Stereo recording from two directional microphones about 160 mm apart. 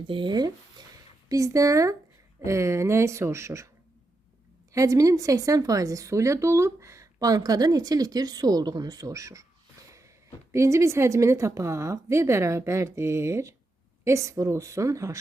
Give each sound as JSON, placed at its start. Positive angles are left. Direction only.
{"t": 0.1, "sound": "a woman's voice", "side_deg": -30}
{"t": 4.7, "sound": "speech", "side_deg": -20}
{"t": 10.5, "sound": "a woman's voice", "side_deg": -20}